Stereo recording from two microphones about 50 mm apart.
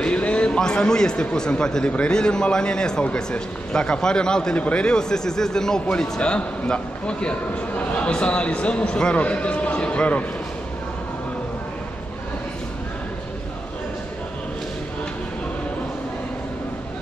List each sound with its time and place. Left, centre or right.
0.0 s a man's voice: left